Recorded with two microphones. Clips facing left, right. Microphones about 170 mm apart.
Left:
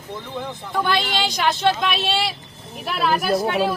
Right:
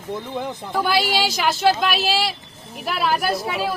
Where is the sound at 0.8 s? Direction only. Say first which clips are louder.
Right 2 dB; 5° right (ahead or behind).